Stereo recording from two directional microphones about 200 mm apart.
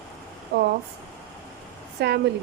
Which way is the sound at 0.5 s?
60° right (ahead or behind).